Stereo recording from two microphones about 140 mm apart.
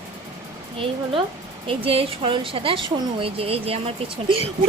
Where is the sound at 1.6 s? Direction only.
40° right (ahead or behind).